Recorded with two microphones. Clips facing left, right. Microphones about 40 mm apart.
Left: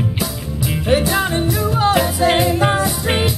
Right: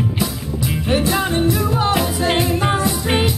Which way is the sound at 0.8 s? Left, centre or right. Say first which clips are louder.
Left 2 dB; centre.